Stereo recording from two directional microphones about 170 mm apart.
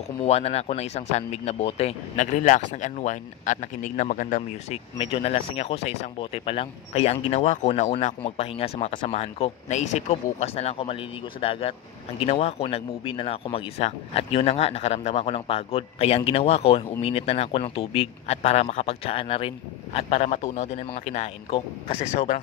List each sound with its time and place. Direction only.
0.2 s speech: 35° left (ahead or behind)
4.9 s speech: 35° left (ahead or behind)